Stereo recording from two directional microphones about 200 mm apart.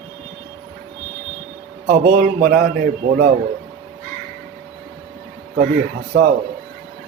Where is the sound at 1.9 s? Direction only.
50° right (ahead or behind).